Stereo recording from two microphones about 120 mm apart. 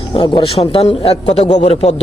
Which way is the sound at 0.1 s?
50° left (ahead or behind).